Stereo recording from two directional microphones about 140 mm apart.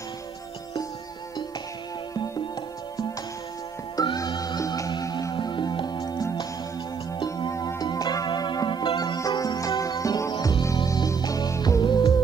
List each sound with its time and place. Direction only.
3.9 s music: 30° left (ahead or behind)